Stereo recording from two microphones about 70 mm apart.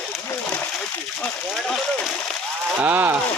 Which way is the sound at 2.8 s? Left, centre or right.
Right.